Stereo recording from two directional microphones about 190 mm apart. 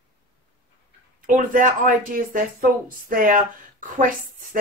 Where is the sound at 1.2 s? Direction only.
45° right (ahead or behind).